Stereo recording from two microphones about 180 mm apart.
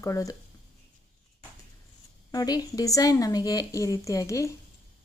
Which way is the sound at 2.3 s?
20° left (ahead or behind).